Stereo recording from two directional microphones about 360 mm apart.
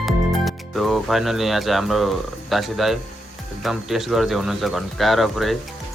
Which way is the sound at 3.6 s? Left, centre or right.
Centre.